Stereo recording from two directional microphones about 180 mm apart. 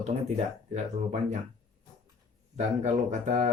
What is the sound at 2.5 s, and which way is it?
Speech, 40° right (ahead or behind).